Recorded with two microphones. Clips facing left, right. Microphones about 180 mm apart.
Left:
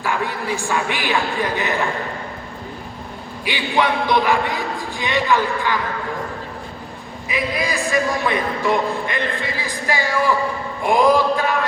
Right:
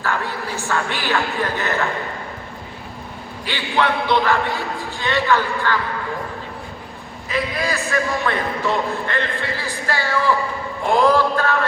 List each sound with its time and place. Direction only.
0.0 s a man's voice: 15° left (ahead or behind)
3.4 s a man's voice: 15° left (ahead or behind)
7.3 s a man's voice: 15° left (ahead or behind)